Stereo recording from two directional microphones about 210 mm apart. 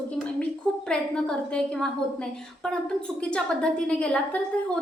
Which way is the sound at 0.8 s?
5° left (ahead or behind).